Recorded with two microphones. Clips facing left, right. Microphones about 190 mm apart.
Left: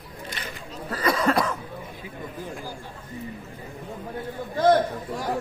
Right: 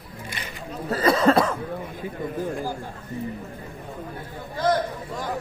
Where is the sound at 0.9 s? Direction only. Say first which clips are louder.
Right 4 dB; 25° right (ahead or behind).